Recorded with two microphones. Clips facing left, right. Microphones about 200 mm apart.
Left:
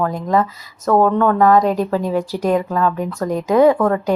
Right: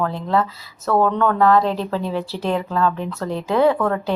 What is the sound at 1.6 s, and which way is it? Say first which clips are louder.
Speech: left 5 dB; 45° left (ahead or behind).